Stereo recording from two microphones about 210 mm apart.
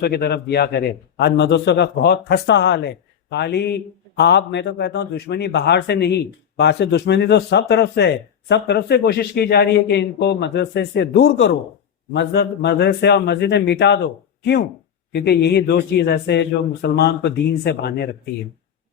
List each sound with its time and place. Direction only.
0.0 s a man's voice: 50° left (ahead or behind)